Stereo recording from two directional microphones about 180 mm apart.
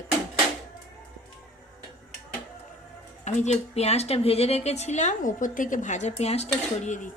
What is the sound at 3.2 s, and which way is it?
A woman's voice, 40° left (ahead or behind).